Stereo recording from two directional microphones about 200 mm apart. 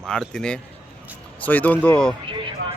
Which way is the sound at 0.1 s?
5° left (ahead or behind).